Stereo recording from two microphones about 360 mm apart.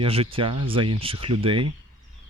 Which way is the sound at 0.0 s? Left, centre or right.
Centre.